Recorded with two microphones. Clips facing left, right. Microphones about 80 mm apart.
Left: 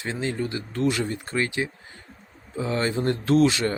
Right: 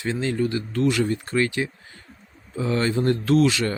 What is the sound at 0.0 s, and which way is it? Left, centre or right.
Speech, left.